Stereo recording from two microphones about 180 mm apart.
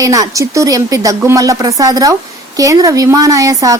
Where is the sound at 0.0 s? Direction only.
20° right (ahead or behind).